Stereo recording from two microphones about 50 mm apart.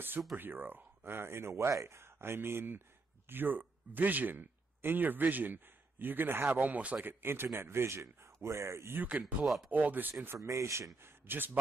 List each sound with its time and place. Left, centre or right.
0.4 s speech: right
1.5 s speech: right
7.1 s speech: right
7.4 s speech: right
8.9 s speech: right
9.2 s speech: centre
9.7 s speech: right
10.3 s speech: right
11.0 s speech: right